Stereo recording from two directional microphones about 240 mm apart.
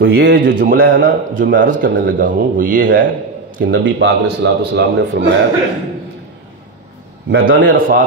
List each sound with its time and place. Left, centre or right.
0.0 s a man's voice: right
3.6 s a man's voice: right
7.2 s a man's voice: right
7.5 s a man's voice: right